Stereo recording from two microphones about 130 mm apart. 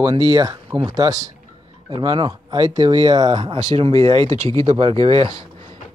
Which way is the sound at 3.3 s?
45° right (ahead or behind).